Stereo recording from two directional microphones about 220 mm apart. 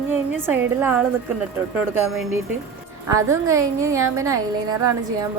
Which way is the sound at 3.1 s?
15° right (ahead or behind).